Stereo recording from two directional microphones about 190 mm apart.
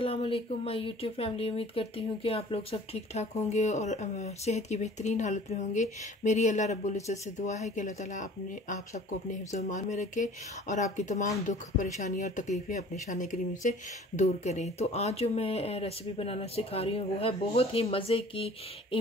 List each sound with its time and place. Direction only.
0.0 s speech: 30° left (ahead or behind)